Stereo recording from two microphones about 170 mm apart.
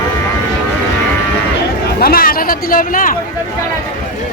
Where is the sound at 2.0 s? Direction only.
60° left (ahead or behind).